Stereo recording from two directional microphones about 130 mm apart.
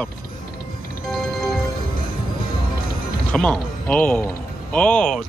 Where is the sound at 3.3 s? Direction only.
10° left (ahead or behind).